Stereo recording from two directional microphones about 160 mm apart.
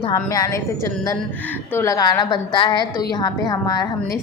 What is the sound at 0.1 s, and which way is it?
Speech, 20° left (ahead or behind).